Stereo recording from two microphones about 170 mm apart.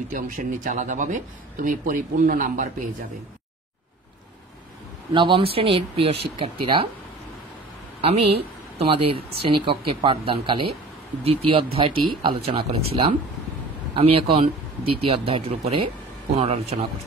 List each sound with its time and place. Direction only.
0.1 s speech: 50° right (ahead or behind)
5.1 s speech: 30° right (ahead or behind)
8.0 s speech: 35° right (ahead or behind)